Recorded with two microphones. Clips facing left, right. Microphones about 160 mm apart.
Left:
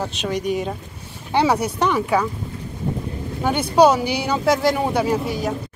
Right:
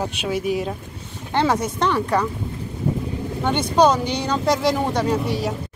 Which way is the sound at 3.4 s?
5° left (ahead or behind).